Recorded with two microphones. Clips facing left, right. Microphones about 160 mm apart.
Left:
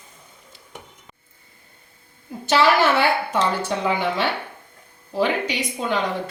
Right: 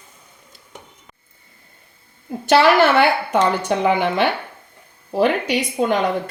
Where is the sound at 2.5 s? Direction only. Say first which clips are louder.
Right 4 dB; 70° right (ahead or behind); by 5.9 s 55° right (ahead or behind).